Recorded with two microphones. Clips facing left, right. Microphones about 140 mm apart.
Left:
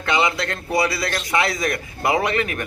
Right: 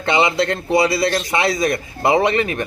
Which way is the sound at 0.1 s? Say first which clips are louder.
Right 4 dB; 25° right (ahead or behind).